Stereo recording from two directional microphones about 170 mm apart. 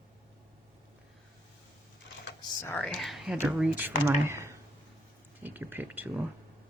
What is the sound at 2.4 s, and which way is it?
Computer keyboard, 25° left (ahead or behind).